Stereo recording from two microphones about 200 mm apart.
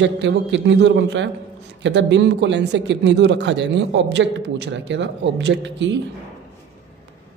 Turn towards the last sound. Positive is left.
turn(degrees=-65)  # may be behind; listen again after turning